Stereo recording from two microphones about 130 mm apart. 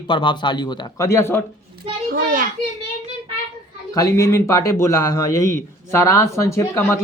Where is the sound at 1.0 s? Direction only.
20° left (ahead or behind).